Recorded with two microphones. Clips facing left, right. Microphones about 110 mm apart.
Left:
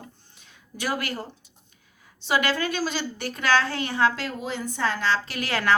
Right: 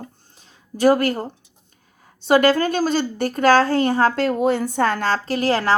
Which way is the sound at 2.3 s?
45° right (ahead or behind).